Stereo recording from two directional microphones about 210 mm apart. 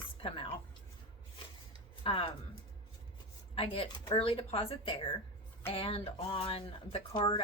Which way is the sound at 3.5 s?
25° left (ahead or behind).